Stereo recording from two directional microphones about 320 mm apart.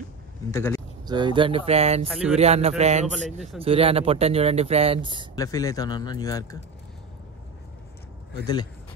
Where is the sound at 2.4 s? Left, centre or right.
Centre.